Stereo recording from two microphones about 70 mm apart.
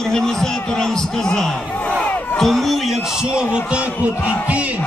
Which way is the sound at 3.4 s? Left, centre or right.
Centre.